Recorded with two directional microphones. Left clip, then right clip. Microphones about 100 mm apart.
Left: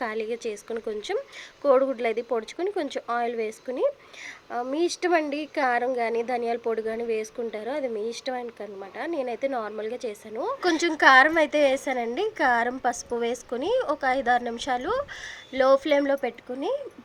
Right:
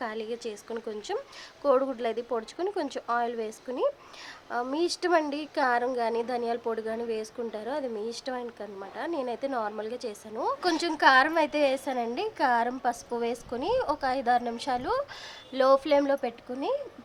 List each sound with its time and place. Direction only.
0.0 s a woman's voice: 25° left (ahead or behind)
10.6 s a woman's voice: 30° left (ahead or behind)